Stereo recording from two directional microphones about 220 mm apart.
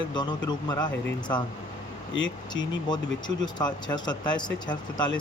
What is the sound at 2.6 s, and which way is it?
Speech, 20° left (ahead or behind).